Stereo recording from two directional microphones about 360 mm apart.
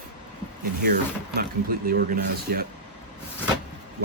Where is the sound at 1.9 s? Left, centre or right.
Right.